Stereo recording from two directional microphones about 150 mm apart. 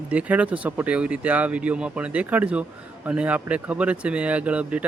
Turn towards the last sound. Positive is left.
turn(degrees=-10)  # may be behind; listen again after turning